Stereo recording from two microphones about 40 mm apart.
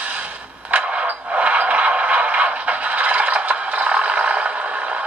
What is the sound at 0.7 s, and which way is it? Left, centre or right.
Scrape, right.